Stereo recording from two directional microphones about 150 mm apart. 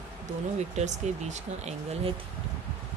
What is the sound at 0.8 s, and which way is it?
Speech, 50° right (ahead or behind).